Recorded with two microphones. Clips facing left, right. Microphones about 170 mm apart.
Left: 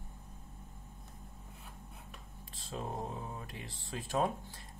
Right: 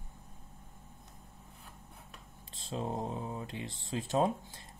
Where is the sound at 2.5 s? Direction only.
25° right (ahead or behind).